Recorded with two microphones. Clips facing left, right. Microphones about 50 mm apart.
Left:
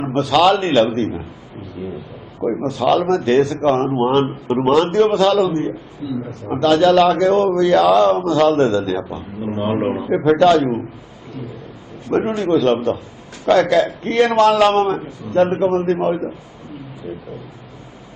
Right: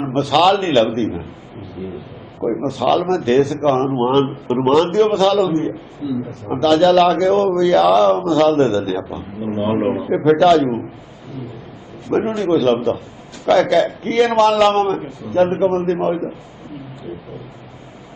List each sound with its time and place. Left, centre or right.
0.0 s a man's voice: centre
2.4 s a man's voice: centre
12.1 s a man's voice: centre